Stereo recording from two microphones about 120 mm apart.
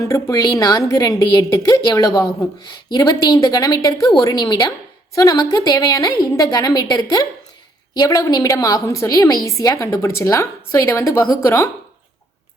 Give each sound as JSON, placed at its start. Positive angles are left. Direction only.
{"t": 0.0, "sound": "a woman's voice", "side_deg": 30}